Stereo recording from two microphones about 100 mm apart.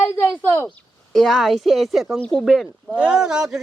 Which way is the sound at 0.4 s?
20° left (ahead or behind).